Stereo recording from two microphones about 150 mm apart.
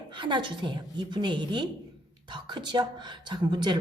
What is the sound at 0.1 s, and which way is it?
A woman's voice, 30° right (ahead or behind).